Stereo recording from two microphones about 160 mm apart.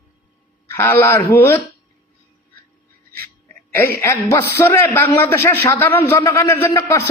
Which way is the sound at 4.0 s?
15° left (ahead or behind).